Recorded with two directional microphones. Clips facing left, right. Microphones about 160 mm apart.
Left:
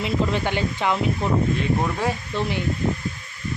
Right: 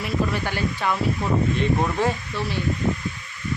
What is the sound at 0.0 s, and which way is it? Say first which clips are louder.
Speech: left 2 dB; 20° left (ahead or behind).